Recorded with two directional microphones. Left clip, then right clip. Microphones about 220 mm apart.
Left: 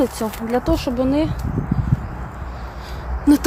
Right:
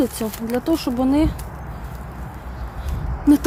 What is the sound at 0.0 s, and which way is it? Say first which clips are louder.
Speech: left 2 dB; 10° right (ahead or behind).